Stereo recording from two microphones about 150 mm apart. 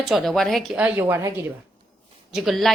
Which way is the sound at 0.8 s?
15° right (ahead or behind).